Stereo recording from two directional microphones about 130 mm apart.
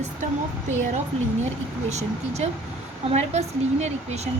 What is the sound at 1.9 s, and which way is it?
A woman's voice, 60° right (ahead or behind).